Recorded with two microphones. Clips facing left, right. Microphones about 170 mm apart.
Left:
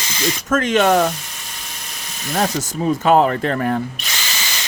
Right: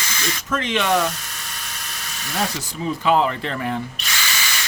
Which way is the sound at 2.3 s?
45° left (ahead or behind).